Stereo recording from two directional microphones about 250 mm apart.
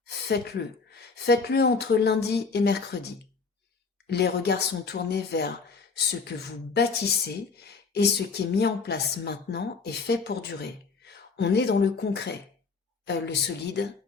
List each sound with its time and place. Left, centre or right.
0.0 s speech: left